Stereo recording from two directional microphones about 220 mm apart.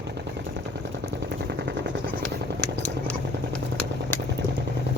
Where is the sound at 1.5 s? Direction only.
50° right (ahead or behind).